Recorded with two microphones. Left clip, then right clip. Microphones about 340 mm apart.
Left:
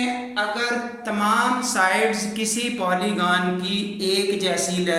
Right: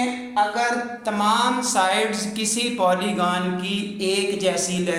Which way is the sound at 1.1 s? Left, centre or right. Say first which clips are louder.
Even; centre.